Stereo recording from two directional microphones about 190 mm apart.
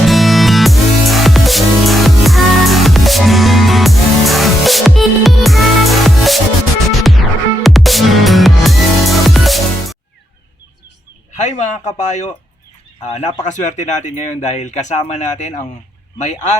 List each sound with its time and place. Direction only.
0.0 s music: centre (ahead or behind)
7.6 s music: centre (ahead or behind)
11.3 s speech: 40° left (ahead or behind)